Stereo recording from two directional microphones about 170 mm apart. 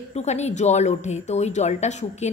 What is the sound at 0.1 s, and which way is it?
A woman's voice, 40° left (ahead or behind).